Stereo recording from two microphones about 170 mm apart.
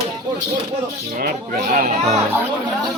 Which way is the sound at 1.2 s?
55° right (ahead or behind).